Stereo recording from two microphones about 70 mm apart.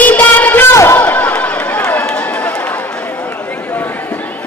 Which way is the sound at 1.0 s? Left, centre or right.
Left.